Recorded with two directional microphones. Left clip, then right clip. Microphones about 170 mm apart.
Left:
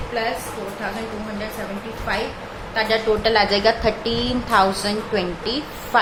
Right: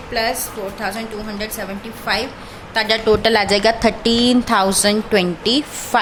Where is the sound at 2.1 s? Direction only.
90° right.